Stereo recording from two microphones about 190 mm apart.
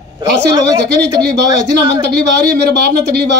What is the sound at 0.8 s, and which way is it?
Speech, 60° right (ahead or behind).